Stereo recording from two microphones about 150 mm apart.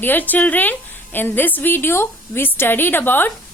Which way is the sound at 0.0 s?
10° left (ahead or behind).